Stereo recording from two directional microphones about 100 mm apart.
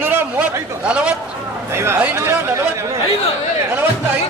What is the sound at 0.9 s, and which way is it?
Speech, 10° right (ahead or behind).